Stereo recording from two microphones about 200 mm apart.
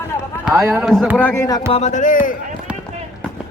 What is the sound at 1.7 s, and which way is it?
Speech, 35° left (ahead or behind).